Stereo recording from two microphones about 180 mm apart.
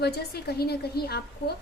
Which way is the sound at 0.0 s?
65° left (ahead or behind).